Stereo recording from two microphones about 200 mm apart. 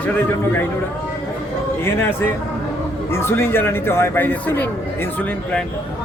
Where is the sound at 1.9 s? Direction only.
10° left (ahead or behind).